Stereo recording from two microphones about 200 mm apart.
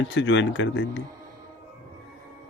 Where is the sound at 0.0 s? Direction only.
65° left (ahead or behind).